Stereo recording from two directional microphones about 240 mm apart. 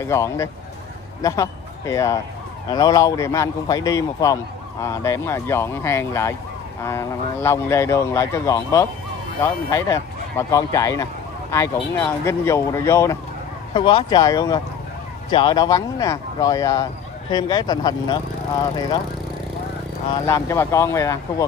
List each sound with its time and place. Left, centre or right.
0.0 s a man's voice: centre
20.2 s speech: centre